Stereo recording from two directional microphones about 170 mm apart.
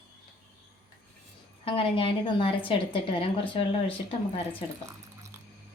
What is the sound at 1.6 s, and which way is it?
A woman's voice, 30° left (ahead or behind).